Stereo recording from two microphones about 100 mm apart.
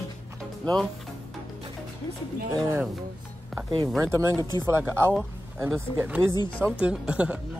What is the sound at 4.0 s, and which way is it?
Speech, 25° right (ahead or behind).